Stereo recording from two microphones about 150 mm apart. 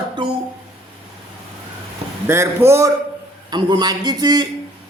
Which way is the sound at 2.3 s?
15° right (ahead or behind).